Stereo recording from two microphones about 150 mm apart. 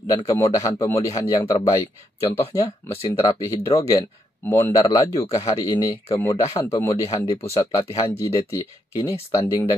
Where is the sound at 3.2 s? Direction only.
20° left (ahead or behind).